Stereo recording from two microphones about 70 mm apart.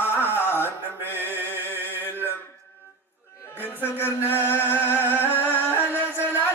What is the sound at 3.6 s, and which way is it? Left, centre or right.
Music, left.